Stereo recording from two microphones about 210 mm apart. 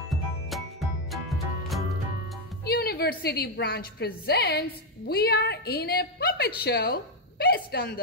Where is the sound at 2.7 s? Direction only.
50° left (ahead or behind).